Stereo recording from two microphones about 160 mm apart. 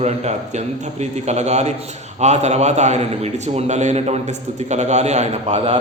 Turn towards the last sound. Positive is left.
turn(degrees=-40)  # may be behind; listen again after turning